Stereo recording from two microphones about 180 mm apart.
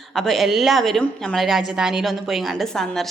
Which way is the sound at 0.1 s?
Centre (ahead or behind).